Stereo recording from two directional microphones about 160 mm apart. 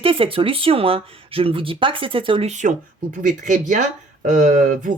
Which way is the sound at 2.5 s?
50° right (ahead or behind).